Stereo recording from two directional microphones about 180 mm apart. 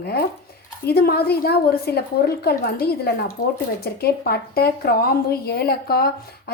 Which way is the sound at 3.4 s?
45° left (ahead or behind).